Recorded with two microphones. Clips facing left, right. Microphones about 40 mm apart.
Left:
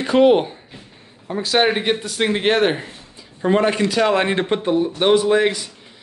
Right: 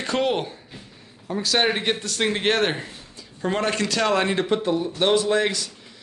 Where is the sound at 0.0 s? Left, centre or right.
Centre.